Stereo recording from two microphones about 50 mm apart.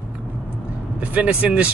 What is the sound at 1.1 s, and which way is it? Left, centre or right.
Speech, right.